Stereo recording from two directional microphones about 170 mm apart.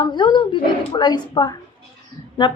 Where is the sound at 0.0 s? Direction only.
25° left (ahead or behind).